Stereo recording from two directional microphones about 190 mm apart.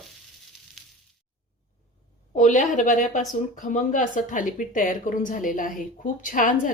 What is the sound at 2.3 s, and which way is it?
Speech, 40° left (ahead or behind).